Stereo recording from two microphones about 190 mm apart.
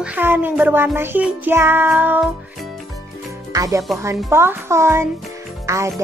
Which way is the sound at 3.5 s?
20° right (ahead or behind).